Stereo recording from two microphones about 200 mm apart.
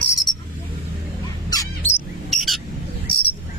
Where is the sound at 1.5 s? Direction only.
20° left (ahead or behind).